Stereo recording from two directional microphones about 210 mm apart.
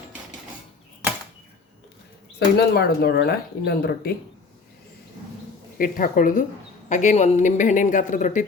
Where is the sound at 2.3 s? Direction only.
45° left (ahead or behind).